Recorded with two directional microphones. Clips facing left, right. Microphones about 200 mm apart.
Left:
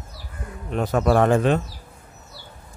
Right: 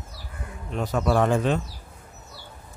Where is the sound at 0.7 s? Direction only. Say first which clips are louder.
Left 4 dB; 55° left (ahead or behind).